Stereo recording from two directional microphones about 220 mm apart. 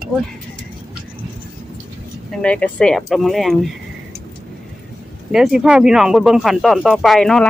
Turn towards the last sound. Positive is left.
turn(degrees=0)  # may be behind; listen again after turning